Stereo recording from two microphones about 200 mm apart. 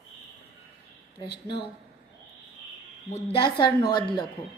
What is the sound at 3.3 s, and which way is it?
Speech, 20° left (ahead or behind).